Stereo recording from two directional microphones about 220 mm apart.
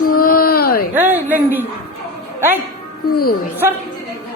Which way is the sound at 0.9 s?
10° right (ahead or behind).